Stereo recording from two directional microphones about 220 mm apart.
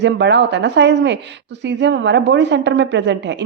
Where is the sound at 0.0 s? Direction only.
50° right (ahead or behind).